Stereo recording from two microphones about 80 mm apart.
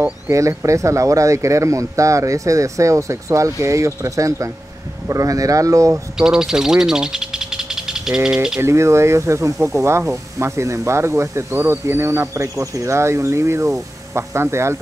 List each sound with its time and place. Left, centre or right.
0.3 s speech: right
6.1 s speech: centre
8.5 s speech: right